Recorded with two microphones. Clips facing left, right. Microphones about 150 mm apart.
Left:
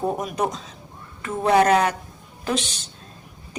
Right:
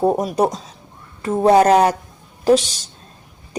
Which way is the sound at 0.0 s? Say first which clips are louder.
Right 7 dB; 35° right (ahead or behind).